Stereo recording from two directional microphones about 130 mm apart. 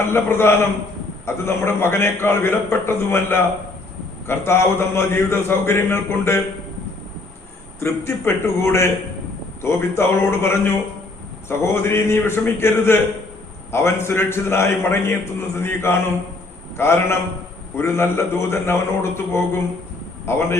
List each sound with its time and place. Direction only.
0.0 s a man's voice: 20° left (ahead or behind)
7.8 s a man's voice: 20° left (ahead or behind)